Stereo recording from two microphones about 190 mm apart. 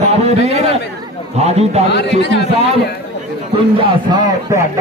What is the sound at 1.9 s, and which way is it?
Speech, 65° left (ahead or behind).